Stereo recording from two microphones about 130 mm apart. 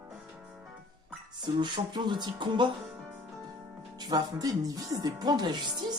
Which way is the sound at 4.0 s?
30° right (ahead or behind).